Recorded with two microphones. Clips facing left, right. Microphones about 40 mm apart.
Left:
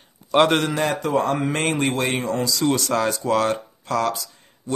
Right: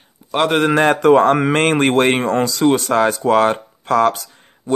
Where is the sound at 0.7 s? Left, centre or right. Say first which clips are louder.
Right 10 dB; right.